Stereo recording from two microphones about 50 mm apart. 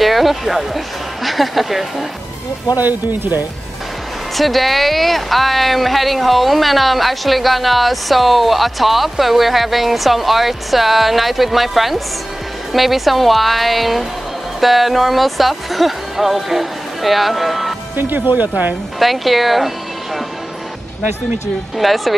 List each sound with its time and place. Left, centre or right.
0.0 s speech: centre
2.8 s speech: right
4.4 s speech: centre
17.9 s speech: right
18.9 s speech: centre
21.7 s speech: centre